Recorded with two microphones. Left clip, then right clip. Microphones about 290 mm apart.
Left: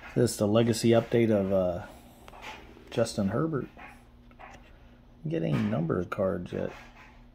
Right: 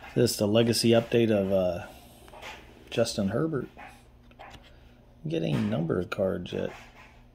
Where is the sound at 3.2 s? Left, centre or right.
Centre.